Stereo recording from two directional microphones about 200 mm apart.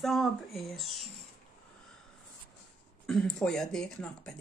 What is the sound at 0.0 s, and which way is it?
Speech, centre (ahead or behind).